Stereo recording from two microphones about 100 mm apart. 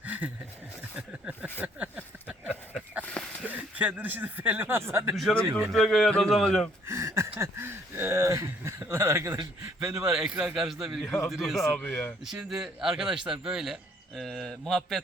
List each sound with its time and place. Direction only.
0.0 s a sound: 15° right (ahead or behind)
3.4 s speech: 15° right (ahead or behind)
5.1 s speech: 5° left (ahead or behind)
5.5 s speech: 25° right (ahead or behind)
5.7 s speech: 5° left (ahead or behind)
6.8 s a sound: 30° right (ahead or behind)
9.8 s speech: 30° right (ahead or behind)
10.1 s speech: 5° right (ahead or behind)
11.7 s speech: 15° left (ahead or behind)
12.2 s speech: 5° right (ahead or behind)